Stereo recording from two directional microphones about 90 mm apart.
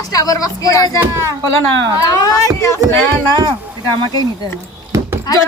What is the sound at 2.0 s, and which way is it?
Speech, 45° left (ahead or behind).